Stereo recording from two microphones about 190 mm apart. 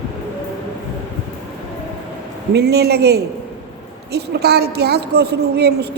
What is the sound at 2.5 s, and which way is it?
A woman's voice, 60° right (ahead or behind).